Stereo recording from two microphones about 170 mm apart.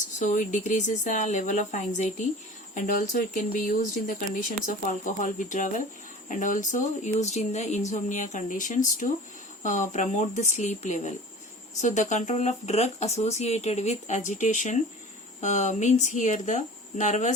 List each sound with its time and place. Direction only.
0.2 s speech: 45° left (ahead or behind)